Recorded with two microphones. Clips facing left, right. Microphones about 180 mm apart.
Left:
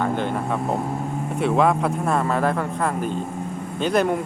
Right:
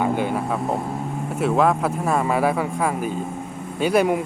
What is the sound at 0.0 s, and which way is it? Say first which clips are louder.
Speech: right 1 dB; 10° right (ahead or behind).